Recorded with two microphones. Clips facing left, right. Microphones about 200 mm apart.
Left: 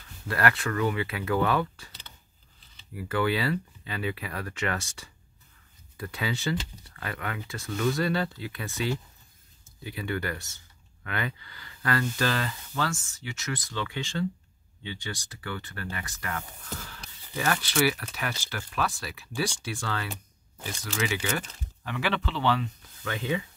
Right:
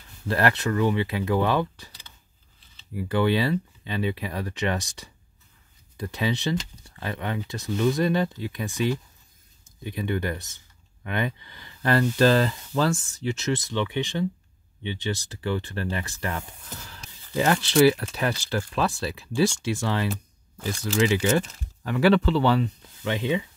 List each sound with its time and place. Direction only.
0.3 s speech: 25° right (ahead or behind)
17.4 s speech: 25° right (ahead or behind)
23.0 s speech: 20° right (ahead or behind)